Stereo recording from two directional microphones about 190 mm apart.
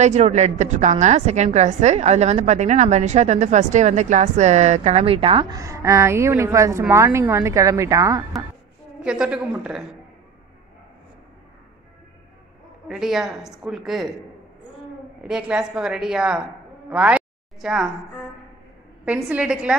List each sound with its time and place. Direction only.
0.0 s a woman's voice: 35° right (ahead or behind); by 8.2 s 15° right (ahead or behind)
9.0 s a woman's voice: 5° right (ahead or behind)
12.8 s a woman's voice: 5° right (ahead or behind)
15.2 s a woman's voice: 5° right (ahead or behind)
16.9 s a sound: 5° right (ahead or behind)
19.0 s a woman's voice: 5° right (ahead or behind)